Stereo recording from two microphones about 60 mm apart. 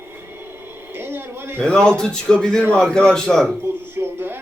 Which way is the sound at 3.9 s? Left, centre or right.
Right.